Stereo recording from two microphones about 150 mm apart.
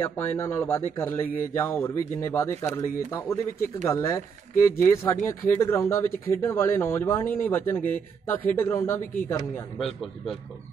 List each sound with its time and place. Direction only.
0.0 s speech: 15° left (ahead or behind)
9.8 s a man's voice: centre (ahead or behind)